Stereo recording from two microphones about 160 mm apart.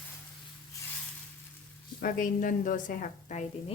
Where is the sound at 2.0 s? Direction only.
60° left (ahead or behind).